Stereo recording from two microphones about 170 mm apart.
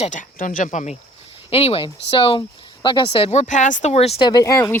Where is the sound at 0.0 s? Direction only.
50° left (ahead or behind).